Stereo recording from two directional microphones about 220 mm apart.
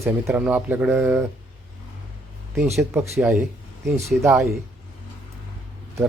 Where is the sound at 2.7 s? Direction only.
10° right (ahead or behind).